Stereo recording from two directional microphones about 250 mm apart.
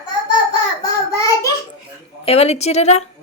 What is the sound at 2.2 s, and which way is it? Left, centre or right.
Speech, left.